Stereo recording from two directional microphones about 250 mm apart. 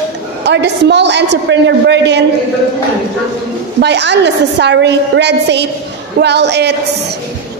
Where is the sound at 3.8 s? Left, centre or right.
Right.